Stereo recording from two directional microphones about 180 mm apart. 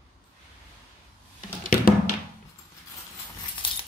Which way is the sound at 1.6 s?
55° left (ahead or behind).